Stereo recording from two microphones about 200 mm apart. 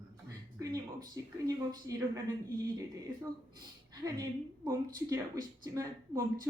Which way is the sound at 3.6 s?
20° right (ahead or behind).